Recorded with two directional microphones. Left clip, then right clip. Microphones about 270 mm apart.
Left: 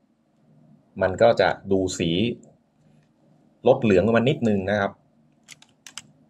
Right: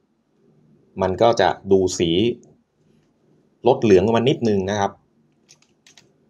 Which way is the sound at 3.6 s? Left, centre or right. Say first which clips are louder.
Right 3 dB; centre.